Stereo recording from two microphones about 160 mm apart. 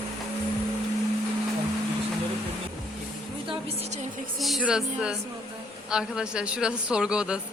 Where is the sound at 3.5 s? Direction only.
40° right (ahead or behind).